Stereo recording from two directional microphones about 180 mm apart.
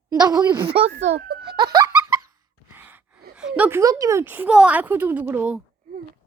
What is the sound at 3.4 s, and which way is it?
Speech, 5° right (ahead or behind).